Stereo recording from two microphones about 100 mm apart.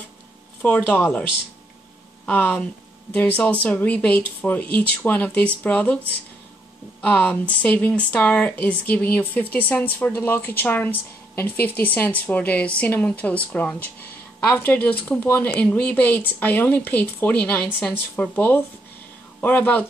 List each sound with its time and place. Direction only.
0.6 s speech: 15° left (ahead or behind)
2.2 s speech: 15° left (ahead or behind)
7.0 s speech: 20° left (ahead or behind)